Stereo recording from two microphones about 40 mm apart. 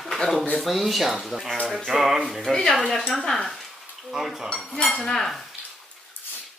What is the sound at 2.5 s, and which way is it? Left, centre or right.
Speech, centre.